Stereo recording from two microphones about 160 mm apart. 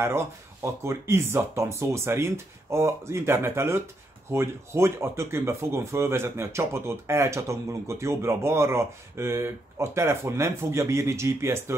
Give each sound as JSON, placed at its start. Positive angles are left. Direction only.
{"t": 0.8, "sound": "speech", "side_deg": -15}